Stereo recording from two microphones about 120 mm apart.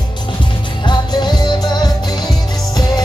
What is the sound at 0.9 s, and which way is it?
Music, 40° left (ahead or behind).